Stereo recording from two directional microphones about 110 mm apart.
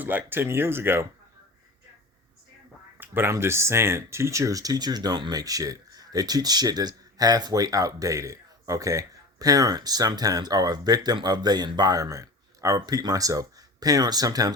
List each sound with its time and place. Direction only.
0.0 s speech: 15° right (ahead or behind)
3.0 s speech: 20° right (ahead or behind)